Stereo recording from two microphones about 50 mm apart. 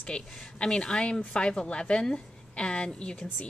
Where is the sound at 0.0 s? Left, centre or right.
Centre.